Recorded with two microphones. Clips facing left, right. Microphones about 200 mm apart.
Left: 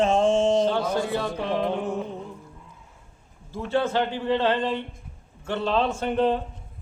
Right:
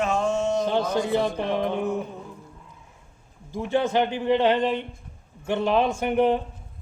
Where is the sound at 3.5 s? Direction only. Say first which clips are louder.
Right 1 dB; 15° right (ahead or behind).